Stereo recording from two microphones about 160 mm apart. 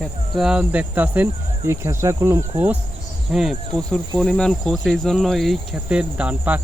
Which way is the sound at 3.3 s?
Centre (ahead or behind).